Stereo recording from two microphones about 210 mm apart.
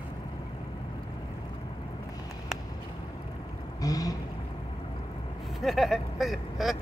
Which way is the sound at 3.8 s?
15° left (ahead or behind).